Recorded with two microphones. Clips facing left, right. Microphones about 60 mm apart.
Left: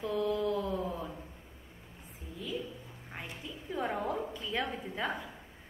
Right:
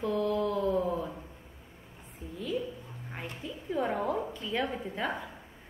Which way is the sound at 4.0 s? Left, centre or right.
Centre.